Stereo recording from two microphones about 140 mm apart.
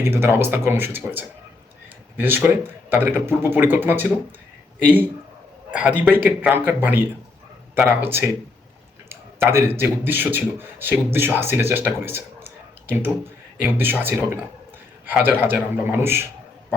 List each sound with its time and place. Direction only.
0.0 s speech: 15° right (ahead or behind)
5.7 s speech: 10° right (ahead or behind)
9.5 s a man's voice: 15° right (ahead or behind)